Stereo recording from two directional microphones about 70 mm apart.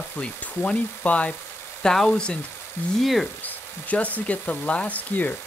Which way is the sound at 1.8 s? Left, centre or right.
Centre.